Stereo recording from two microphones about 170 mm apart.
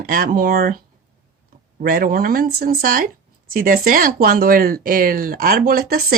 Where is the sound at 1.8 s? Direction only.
55° right (ahead or behind).